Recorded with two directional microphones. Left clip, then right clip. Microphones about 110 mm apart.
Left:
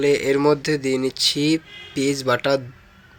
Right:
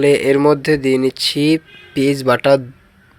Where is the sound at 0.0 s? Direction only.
55° right (ahead or behind).